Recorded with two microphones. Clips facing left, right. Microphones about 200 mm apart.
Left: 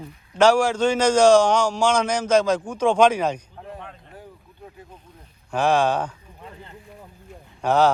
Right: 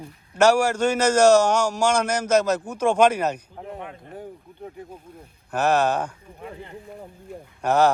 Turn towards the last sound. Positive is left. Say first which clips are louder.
# even
turn(degrees=-10)  # may be behind; listen again after turning